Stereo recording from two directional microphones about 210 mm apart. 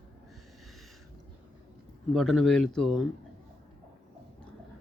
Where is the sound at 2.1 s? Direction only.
Centre (ahead or behind).